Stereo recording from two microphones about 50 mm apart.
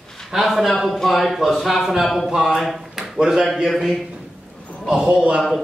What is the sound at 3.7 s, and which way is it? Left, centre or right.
Speech, centre.